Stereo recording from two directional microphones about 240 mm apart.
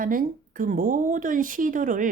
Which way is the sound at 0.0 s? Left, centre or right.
Right.